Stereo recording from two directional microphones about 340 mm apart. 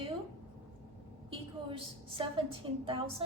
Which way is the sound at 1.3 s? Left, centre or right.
Centre.